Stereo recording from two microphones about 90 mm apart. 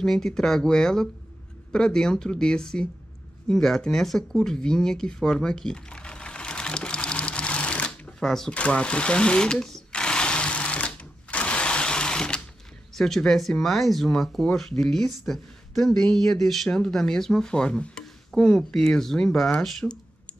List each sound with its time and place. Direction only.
0.0 s speech: 5° left (ahead or behind)
4.4 s a sound: 5° left (ahead or behind)
12.9 s speech: 5° left (ahead or behind)